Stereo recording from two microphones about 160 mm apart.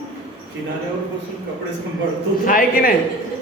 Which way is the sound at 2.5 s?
65° left (ahead or behind).